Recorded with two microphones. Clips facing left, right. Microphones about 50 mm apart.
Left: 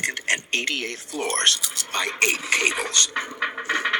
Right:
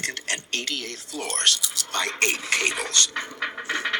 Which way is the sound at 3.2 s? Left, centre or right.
Centre.